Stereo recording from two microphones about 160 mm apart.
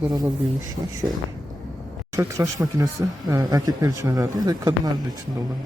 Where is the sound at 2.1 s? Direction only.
20° right (ahead or behind).